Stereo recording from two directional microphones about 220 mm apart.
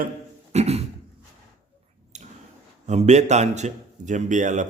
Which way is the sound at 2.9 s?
30° right (ahead or behind).